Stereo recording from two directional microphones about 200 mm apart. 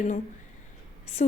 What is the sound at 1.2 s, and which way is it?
Speech, 35° left (ahead or behind).